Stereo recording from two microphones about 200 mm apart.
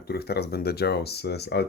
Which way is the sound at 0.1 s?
55° left (ahead or behind).